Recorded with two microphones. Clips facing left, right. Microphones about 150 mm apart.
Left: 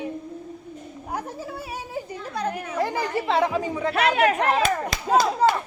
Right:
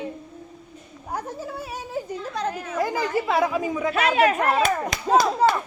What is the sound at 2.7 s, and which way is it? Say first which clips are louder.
Speech: right 2 dB; 30° left (ahead or behind).